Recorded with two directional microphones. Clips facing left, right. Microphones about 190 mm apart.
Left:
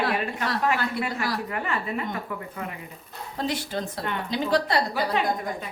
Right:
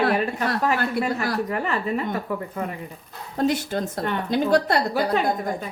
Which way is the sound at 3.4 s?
45° right (ahead or behind).